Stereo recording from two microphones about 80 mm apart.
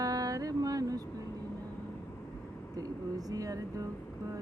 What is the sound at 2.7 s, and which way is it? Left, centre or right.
Speech, right.